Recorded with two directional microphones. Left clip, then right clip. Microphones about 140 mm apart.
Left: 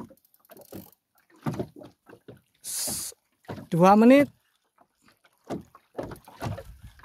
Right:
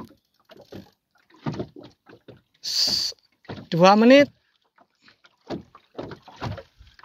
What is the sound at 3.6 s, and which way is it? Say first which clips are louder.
Speech: right 3 dB; 20° left (ahead or behind).